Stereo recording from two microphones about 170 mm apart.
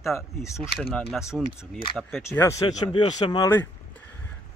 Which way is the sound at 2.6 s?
30° left (ahead or behind).